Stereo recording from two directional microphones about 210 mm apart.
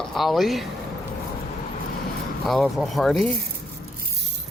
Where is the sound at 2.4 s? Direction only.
Centre (ahead or behind).